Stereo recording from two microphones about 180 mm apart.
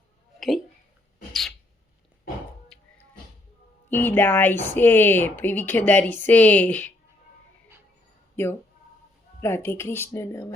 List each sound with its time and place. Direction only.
0.3 s a sound: centre (ahead or behind)
2.7 s music: 5° left (ahead or behind)
3.8 s speech: 10° left (ahead or behind)
8.4 s speech: 10° left (ahead or behind)